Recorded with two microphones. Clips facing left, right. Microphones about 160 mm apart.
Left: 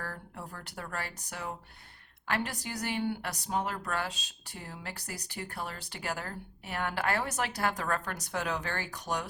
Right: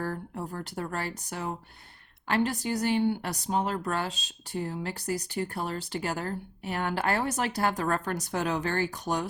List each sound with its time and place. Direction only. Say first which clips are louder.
0.0 s speech: right 8 dB; 30° right (ahead or behind)